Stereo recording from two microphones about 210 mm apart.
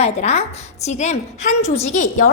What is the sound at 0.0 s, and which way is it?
A woman's voice, 30° left (ahead or behind).